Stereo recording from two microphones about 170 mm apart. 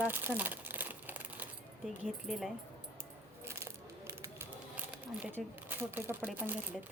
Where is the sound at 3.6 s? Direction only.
15° right (ahead or behind).